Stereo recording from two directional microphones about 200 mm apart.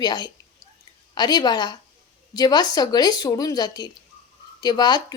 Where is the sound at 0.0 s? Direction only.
20° left (ahead or behind).